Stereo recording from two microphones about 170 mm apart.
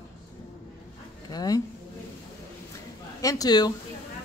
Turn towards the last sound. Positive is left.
turn(degrees=25)  # may be behind; listen again after turning